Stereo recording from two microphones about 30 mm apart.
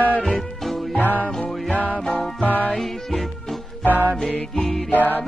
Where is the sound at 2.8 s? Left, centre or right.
Centre.